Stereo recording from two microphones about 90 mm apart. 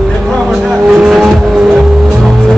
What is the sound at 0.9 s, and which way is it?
Vehicle, 5° right (ahead or behind).